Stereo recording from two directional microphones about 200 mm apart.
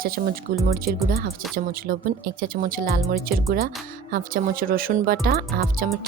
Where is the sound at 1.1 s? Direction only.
45° right (ahead or behind).